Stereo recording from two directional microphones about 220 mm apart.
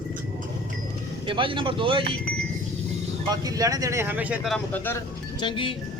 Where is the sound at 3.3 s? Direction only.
15° right (ahead or behind); by 5.0 s 10° left (ahead or behind).